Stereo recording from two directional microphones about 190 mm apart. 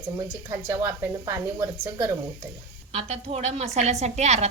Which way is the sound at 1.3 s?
15° right (ahead or behind).